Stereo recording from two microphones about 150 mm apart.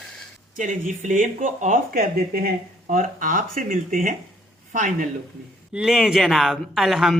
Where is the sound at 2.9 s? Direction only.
65° right (ahead or behind).